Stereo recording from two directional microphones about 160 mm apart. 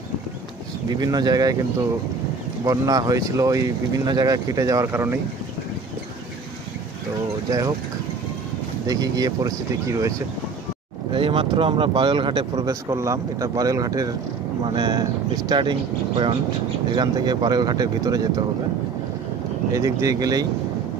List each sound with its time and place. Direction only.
0.8 s speech: 25° right (ahead or behind)
2.6 s speech: 20° right (ahead or behind)
8.8 s speech: 25° right (ahead or behind)
11.1 s speech: 35° right (ahead or behind)
16.9 s speech: 25° right (ahead or behind)
19.7 s speech: 20° right (ahead or behind)